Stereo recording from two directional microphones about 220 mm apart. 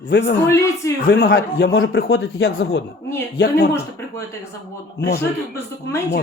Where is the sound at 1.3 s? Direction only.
60° left (ahead or behind).